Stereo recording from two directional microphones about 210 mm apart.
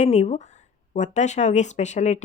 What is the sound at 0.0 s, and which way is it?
Speech, 30° left (ahead or behind).